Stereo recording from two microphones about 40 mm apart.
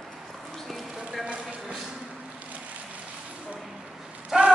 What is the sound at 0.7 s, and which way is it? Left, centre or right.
Clip-clop, centre.